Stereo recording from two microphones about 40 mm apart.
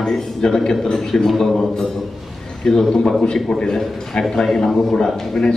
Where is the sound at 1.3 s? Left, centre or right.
Centre.